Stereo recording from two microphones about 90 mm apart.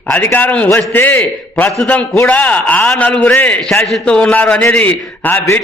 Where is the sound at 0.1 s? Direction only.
20° left (ahead or behind).